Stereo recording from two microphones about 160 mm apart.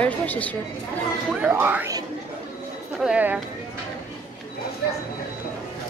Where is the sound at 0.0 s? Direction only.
10° left (ahead or behind).